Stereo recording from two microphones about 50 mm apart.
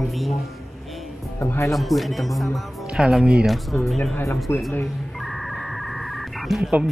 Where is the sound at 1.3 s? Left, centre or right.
Left.